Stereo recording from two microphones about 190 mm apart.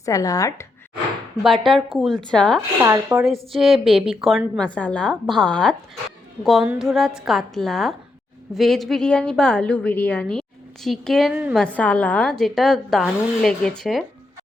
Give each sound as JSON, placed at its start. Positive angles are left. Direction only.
{"t": 0.0, "sound": "speech", "side_deg": 20}
{"t": 1.6, "sound": "a woman's voice", "side_deg": 0}
{"t": 2.6, "sound": "speech", "side_deg": -15}
{"t": 3.5, "sound": "a woman's voice", "side_deg": 0}
{"t": 11.6, "sound": "a woman's voice", "side_deg": 5}